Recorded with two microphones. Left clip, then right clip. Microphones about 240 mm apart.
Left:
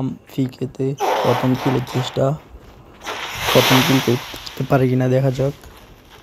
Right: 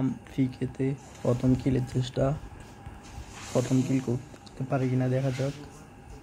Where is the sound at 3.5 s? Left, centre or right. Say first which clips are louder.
Left 14 dB; left.